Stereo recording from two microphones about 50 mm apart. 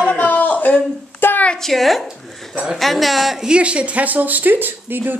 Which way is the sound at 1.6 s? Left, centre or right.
Centre.